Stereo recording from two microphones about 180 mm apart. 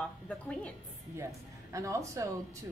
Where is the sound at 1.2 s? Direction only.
15° right (ahead or behind).